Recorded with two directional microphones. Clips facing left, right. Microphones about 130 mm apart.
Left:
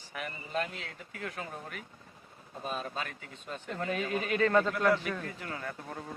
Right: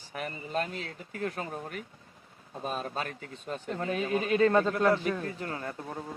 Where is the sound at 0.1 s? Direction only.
40° right (ahead or behind).